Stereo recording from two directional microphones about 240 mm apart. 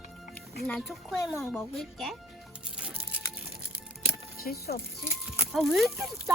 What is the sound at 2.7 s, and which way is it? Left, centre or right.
Music, centre.